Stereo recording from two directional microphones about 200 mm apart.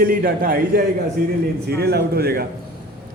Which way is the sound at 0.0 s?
50° right (ahead or behind).